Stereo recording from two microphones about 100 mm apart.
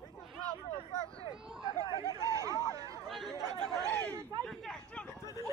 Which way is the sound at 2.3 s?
30° right (ahead or behind).